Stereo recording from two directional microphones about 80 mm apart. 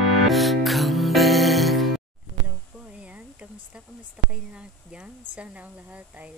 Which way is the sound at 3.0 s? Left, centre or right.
Centre.